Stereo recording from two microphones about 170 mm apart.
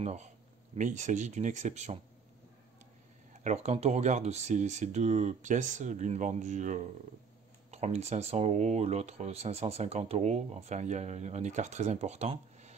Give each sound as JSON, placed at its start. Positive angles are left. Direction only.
{"t": 0.0, "sound": "speech", "side_deg": -40}
{"t": 3.4, "sound": "speech", "side_deg": -40}